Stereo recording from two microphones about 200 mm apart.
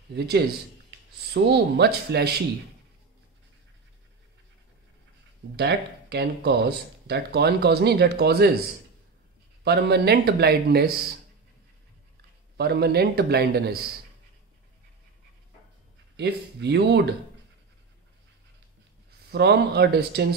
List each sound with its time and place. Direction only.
0.1 s speech: 55° right (ahead or behind)
5.6 s speech: 55° right (ahead or behind)
9.7 s speech: 55° right (ahead or behind)
12.5 s a man's voice: 55° right (ahead or behind)
16.2 s speech: 60° right (ahead or behind)
19.3 s a man's voice: 55° right (ahead or behind)